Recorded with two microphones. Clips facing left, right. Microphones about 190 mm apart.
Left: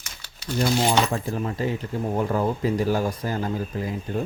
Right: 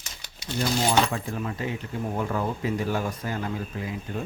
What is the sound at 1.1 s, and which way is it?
Speech, 35° left (ahead or behind).